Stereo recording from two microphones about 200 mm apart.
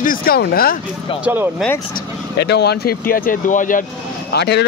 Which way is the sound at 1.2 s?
10° right (ahead or behind).